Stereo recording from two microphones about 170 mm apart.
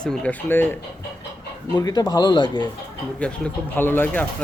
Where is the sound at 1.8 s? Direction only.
20° left (ahead or behind).